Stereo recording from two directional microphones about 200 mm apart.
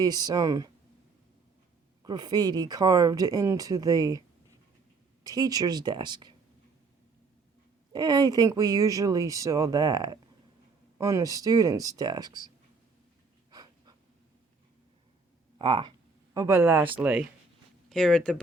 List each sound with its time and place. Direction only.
0.0 s speech: 20° right (ahead or behind)
2.0 s speech: 20° right (ahead or behind)
5.2 s speech: 20° right (ahead or behind)
7.9 s speech: 20° right (ahead or behind)
13.5 s a sound: 20° right (ahead or behind)
15.5 s speech: 25° right (ahead or behind); by 17.2 s 10° right (ahead or behind)
17.8 s speech: 5° left (ahead or behind)